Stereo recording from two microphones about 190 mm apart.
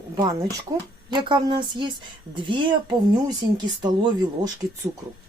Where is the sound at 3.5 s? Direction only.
20° right (ahead or behind).